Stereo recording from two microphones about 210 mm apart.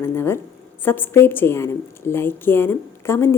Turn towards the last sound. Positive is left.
turn(degrees=10)  # may be behind; listen again after turning